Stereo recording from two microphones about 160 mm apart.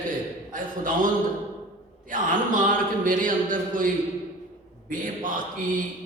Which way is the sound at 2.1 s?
55° right (ahead or behind).